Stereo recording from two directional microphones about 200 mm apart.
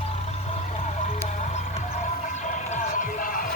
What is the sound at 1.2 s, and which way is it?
Music, 35° left (ahead or behind).